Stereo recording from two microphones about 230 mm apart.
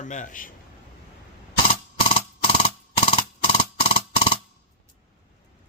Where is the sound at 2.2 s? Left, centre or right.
Left.